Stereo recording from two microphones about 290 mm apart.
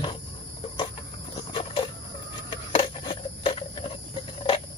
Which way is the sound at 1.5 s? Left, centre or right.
Centre.